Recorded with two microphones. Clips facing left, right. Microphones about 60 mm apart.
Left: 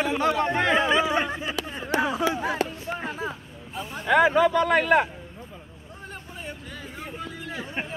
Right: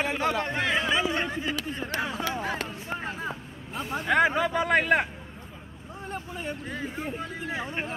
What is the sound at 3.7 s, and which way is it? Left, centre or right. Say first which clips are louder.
Speech: right 2 dB; right.